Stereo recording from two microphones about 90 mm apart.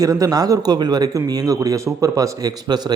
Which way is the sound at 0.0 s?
40° right (ahead or behind).